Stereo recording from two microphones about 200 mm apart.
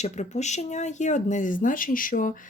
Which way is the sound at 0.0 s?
35° left (ahead or behind).